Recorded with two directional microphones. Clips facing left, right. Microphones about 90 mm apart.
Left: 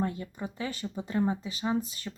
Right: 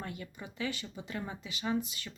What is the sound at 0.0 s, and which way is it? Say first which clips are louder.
Speech: left 10 dB; 30° left (ahead or behind).